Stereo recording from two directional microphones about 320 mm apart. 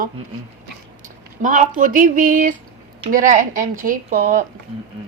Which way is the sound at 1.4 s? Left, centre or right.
Right.